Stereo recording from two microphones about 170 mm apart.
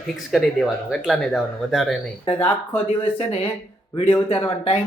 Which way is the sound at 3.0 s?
35° left (ahead or behind).